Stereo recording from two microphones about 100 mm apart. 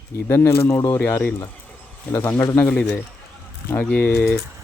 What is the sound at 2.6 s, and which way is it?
Speech, 10° left (ahead or behind).